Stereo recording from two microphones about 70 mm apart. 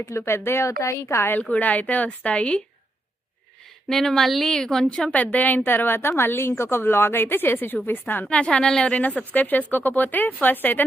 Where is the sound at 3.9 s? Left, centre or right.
Centre; by 8.3 s left.